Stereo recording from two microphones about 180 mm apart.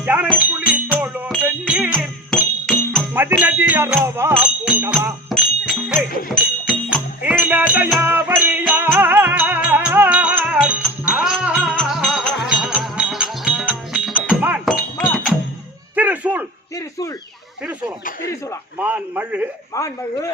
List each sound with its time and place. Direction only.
0.0 s speech: 10° right (ahead or behind)
0.9 s music: 10° right (ahead or behind)
3.1 s music: 10° right (ahead or behind)
16.0 s a sound: 10° right (ahead or behind)
17.6 s a sound: 5° right (ahead or behind)
18.8 s a man's voice: 10° right (ahead or behind)
19.7 s a man's voice: 20° left (ahead or behind)